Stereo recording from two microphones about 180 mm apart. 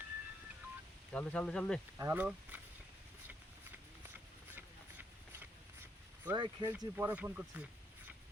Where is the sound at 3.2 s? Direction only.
10° right (ahead or behind).